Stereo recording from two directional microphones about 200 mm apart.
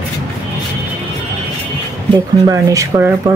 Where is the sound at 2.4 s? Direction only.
15° right (ahead or behind).